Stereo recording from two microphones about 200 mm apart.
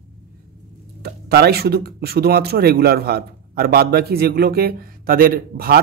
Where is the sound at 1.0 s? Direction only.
50° right (ahead or behind).